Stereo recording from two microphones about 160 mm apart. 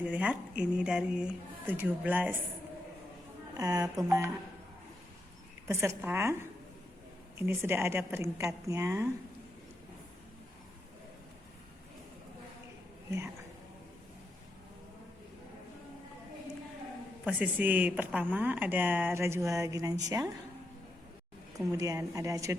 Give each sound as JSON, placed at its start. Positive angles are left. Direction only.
{"t": 0.0, "sound": "speech", "side_deg": -10}
{"t": 3.6, "sound": "speech", "side_deg": -20}
{"t": 5.6, "sound": "speech", "side_deg": -15}
{"t": 13.1, "sound": "speech", "side_deg": -15}
{"t": 17.2, "sound": "speech", "side_deg": -10}
{"t": 21.7, "sound": "speech", "side_deg": -20}